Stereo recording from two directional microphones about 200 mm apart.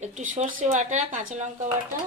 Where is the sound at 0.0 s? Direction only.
35° right (ahead or behind).